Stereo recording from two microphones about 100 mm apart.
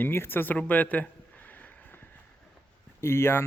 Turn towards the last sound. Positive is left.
turn(degrees=25)  # may be behind; listen again after turning